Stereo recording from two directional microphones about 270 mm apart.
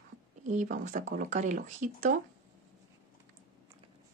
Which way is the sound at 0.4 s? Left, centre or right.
Right.